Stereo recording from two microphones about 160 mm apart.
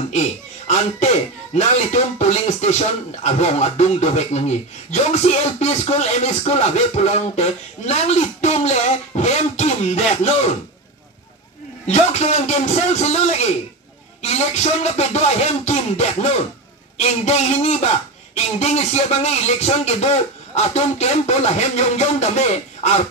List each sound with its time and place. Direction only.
0.1 s a man's voice: 45° left (ahead or behind)
11.9 s speech: 45° left (ahead or behind)